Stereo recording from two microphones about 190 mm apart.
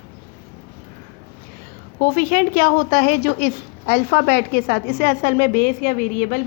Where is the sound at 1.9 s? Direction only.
50° left (ahead or behind).